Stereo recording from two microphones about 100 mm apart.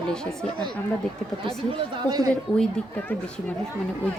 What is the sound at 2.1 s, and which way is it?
Speech, 40° right (ahead or behind).